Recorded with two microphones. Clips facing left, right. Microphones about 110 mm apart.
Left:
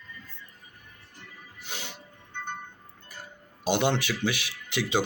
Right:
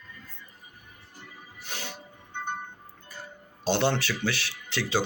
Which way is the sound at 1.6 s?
15° left (ahead or behind).